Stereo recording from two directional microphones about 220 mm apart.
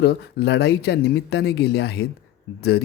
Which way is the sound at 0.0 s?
50° left (ahead or behind).